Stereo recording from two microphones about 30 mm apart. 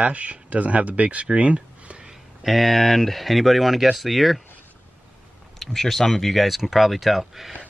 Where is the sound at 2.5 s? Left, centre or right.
Centre.